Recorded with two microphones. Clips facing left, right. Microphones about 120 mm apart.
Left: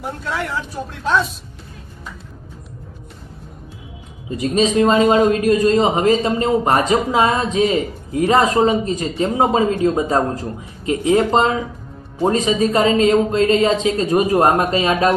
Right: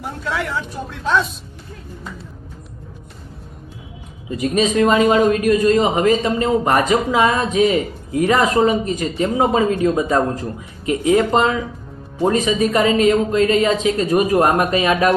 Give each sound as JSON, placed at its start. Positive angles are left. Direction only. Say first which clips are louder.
{"t": 0.0, "sound": "a man's voice", "louder": "even", "side_deg": 0}
{"t": 4.4, "sound": "a man's voice", "louder": "left 1 dB", "side_deg": 30}